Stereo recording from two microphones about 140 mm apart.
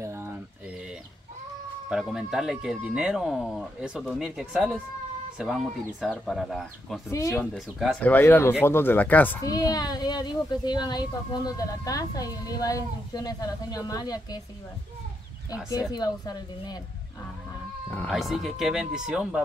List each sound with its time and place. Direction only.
0.0 s a sound: 20° right (ahead or behind)
1.9 s speech: 5° right (ahead or behind)
7.1 s speech: 20° left (ahead or behind)
7.5 s speech: centre (ahead or behind)
8.0 s speech: 15° left (ahead or behind)
9.4 s speech: 25° left (ahead or behind)
15.7 s speech: 25° left (ahead or behind)
17.8 s music: 15° left (ahead or behind)
18.1 s speech: centre (ahead or behind)